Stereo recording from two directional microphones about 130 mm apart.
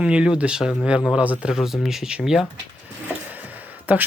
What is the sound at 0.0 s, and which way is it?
Speech, 5° right (ahead or behind).